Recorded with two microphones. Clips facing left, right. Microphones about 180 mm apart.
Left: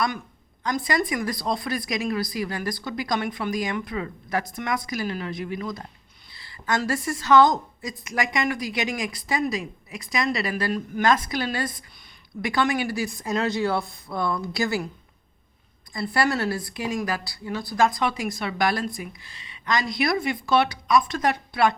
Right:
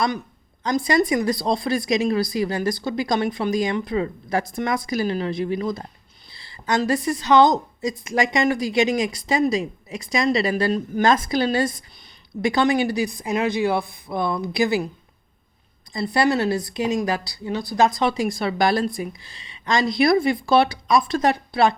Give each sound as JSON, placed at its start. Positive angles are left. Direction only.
{"t": 0.9, "sound": "a woman's voice", "side_deg": -25}
{"t": 16.1, "sound": "a woman's voice", "side_deg": -20}